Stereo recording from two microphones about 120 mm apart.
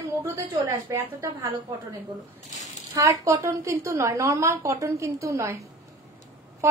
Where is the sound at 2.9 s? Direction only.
25° right (ahead or behind).